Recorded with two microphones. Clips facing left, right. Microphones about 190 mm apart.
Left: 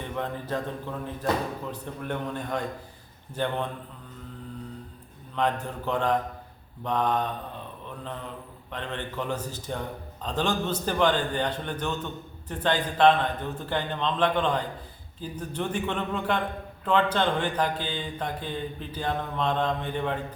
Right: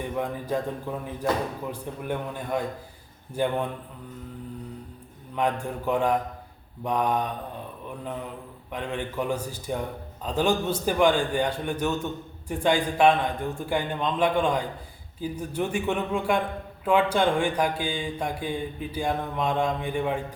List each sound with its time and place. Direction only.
0.0 s a man's voice: 10° right (ahead or behind)
5.3 s a man's voice: 10° right (ahead or behind)
8.7 s a man's voice: 10° right (ahead or behind)